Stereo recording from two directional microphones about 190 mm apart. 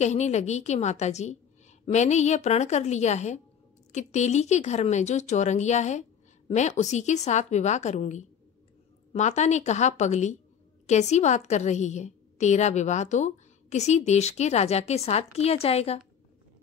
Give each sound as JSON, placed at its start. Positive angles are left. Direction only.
{"t": 0.0, "sound": "a woman's voice", "side_deg": 35}